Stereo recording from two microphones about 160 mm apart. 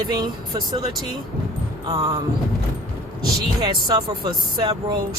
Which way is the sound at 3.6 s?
25° right (ahead or behind).